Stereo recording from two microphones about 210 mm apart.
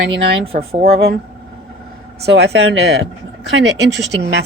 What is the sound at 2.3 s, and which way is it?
A woman's voice, 55° right (ahead or behind).